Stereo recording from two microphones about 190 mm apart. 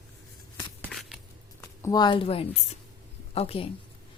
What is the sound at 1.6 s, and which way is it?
A woman's voice, 20° left (ahead or behind).